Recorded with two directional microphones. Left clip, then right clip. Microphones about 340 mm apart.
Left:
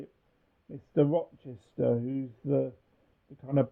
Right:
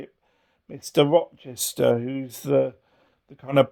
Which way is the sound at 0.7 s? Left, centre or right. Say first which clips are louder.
Right 8 dB; centre.